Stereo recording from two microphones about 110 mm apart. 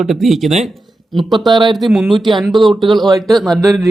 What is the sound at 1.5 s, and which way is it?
Speech, 45° right (ahead or behind).